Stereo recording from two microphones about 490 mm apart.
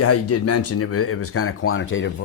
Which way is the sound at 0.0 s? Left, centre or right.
Left.